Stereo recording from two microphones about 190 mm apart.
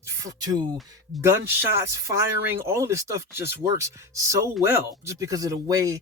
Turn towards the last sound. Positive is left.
turn(degrees=-15)  # may be behind; listen again after turning